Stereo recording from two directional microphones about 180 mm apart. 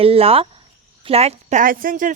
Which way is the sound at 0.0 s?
35° right (ahead or behind).